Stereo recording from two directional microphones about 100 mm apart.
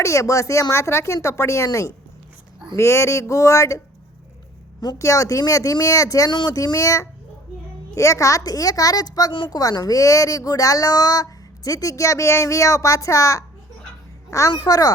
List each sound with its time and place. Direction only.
0.0 s speech: 30° left (ahead or behind)
4.8 s a child's voice: 35° left (ahead or behind)